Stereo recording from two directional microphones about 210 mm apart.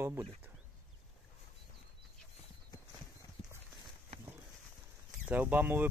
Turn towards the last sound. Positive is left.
turn(degrees=-10)  # may be behind; listen again after turning